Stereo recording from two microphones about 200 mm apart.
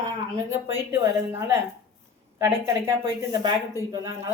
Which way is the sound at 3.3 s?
20° right (ahead or behind).